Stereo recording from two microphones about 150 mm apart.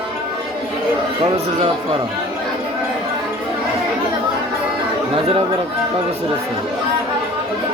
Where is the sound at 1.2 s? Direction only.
35° right (ahead or behind).